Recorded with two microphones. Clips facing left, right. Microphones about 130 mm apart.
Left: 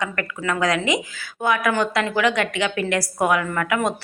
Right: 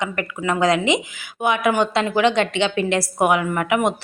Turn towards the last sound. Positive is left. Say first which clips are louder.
# right 3 dB
turn(degrees=-20)  # may be behind; listen again after turning